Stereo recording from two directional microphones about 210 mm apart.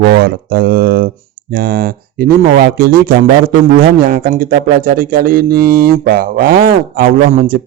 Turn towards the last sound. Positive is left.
turn(degrees=-40)  # may be behind; listen again after turning